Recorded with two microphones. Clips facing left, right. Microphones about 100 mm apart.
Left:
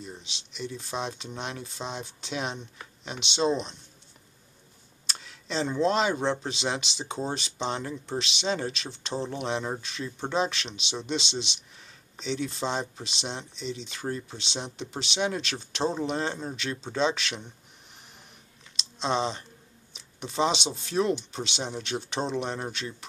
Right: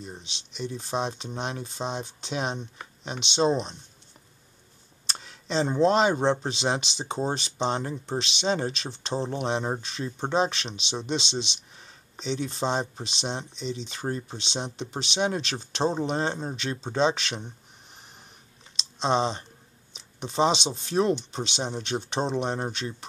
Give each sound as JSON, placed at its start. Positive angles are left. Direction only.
{"t": 0.6, "sound": "speech", "side_deg": -35}
{"t": 5.0, "sound": "speech", "side_deg": -35}
{"t": 18.9, "sound": "speech", "side_deg": -35}
{"t": 19.9, "sound": "a sound", "side_deg": -35}
{"t": 20.6, "sound": "speech", "side_deg": -35}